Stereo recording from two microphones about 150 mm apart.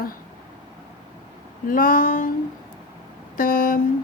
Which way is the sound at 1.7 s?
65° left (ahead or behind).